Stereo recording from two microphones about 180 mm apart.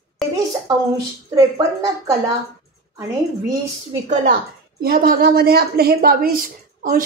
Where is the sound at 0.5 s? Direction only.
20° right (ahead or behind).